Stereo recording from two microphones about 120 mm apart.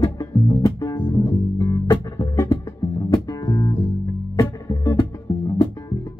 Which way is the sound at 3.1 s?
30° left (ahead or behind).